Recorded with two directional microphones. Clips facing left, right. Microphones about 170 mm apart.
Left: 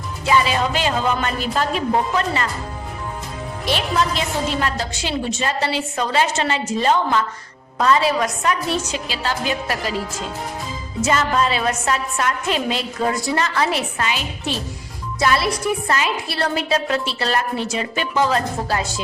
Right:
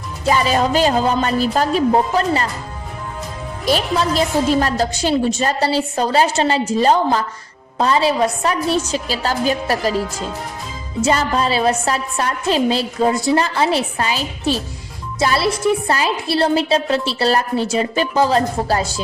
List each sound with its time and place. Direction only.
0.3 s a woman's voice: 40° right (ahead or behind)
3.7 s a woman's voice: 40° right (ahead or behind)
11.0 s a woman's voice: 35° right (ahead or behind)